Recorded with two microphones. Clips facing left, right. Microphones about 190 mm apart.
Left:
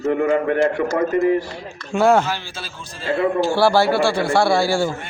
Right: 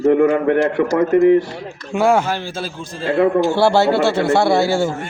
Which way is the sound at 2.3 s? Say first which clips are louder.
Right 5 dB; 50° right (ahead or behind).